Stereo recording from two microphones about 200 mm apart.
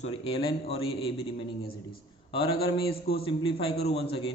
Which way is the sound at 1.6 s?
50° left (ahead or behind).